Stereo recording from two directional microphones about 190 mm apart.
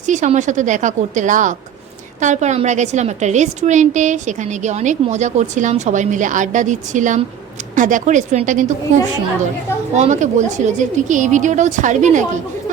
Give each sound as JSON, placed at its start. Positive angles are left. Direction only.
{"t": 0.0, "sound": "a woman's voice", "side_deg": -40}
{"t": 9.9, "sound": "a woman's voice", "side_deg": -40}